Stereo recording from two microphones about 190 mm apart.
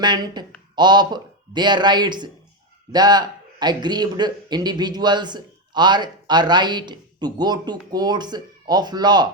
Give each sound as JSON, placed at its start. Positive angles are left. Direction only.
{"t": 0.0, "sound": "a man's voice", "side_deg": -20}